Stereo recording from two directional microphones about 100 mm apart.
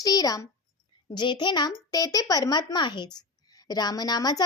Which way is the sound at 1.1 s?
50° left (ahead or behind).